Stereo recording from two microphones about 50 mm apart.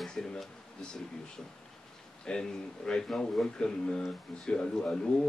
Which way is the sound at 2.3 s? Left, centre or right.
Centre.